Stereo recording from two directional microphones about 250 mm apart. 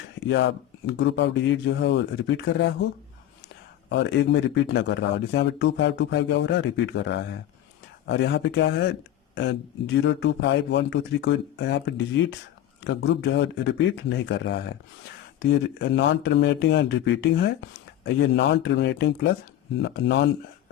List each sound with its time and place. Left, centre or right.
0.3 s speech: left
3.8 s speech: left